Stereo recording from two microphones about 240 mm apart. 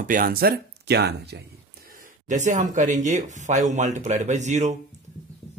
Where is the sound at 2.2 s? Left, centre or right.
Right.